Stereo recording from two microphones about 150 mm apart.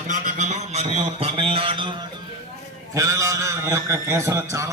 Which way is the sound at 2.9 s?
20° right (ahead or behind).